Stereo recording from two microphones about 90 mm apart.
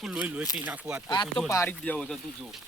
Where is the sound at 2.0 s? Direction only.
5° left (ahead or behind).